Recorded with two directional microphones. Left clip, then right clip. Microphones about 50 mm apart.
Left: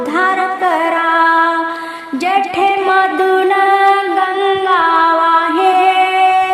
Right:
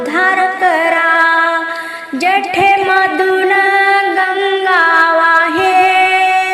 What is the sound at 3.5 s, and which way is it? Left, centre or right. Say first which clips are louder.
Singing: even; centre.